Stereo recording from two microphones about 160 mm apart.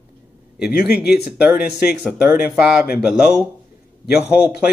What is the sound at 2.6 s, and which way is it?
A man's voice, 5° right (ahead or behind).